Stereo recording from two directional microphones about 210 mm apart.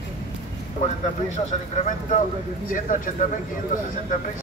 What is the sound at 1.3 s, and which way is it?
Speech, 35° left (ahead or behind).